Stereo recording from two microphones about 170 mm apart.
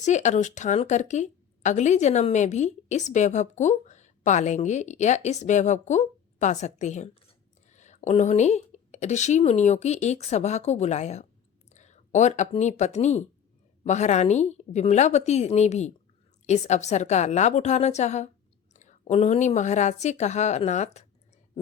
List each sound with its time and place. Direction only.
0.0 s a woman's voice: 45° left (ahead or behind)